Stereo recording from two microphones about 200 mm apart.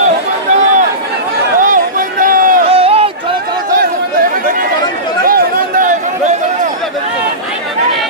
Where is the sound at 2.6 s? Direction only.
30° right (ahead or behind).